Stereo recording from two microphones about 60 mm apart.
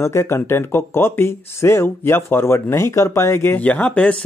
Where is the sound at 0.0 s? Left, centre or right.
Left.